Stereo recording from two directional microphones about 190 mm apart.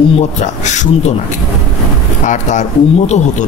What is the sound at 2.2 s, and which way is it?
Speech, 40° left (ahead or behind).